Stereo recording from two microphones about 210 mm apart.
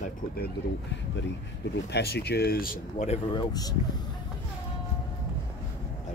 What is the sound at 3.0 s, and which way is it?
Speech, 25° left (ahead or behind).